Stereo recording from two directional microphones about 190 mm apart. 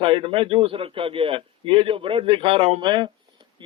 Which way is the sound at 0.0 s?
30° right (ahead or behind).